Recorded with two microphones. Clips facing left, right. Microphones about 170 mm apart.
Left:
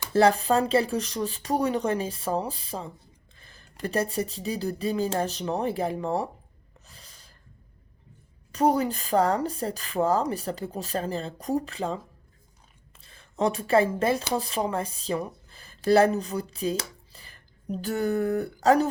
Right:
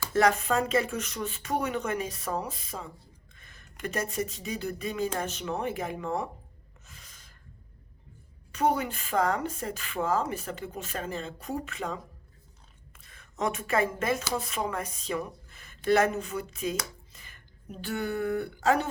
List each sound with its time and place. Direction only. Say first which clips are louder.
0.1 s speech: left 4 dB; 30° left (ahead or behind)
6.8 s gasp: left 1 dB; 35° left (ahead or behind)
8.5 s speech: left 4 dB; 35° left (ahead or behind)
13.0 s a woman's voice: left 5 dB; 30° left (ahead or behind)